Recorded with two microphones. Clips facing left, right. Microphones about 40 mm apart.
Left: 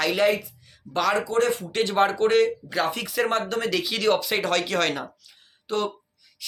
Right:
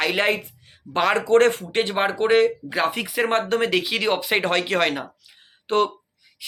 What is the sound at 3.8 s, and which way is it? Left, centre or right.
Speech, right.